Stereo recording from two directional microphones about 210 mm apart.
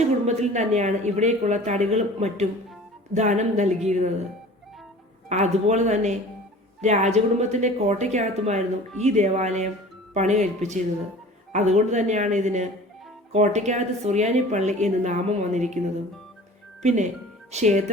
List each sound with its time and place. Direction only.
0.3 s a woman's voice: 30° right (ahead or behind)
5.3 s a woman's voice: 35° right (ahead or behind)
16.8 s a woman's voice: 35° right (ahead or behind)